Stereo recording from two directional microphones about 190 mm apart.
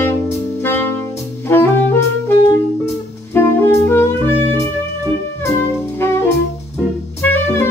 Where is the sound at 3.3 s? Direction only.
10° left (ahead or behind).